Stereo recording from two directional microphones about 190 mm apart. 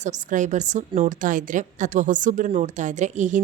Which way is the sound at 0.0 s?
40° right (ahead or behind).